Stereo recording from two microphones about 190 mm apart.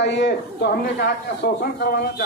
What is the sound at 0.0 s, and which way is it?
A man's voice, 65° left (ahead or behind).